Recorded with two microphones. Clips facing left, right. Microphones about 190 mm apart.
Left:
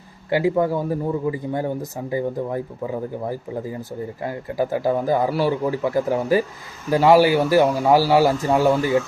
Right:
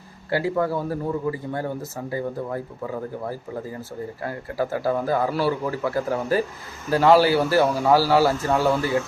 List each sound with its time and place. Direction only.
0.3 s a man's voice: 15° left (ahead or behind)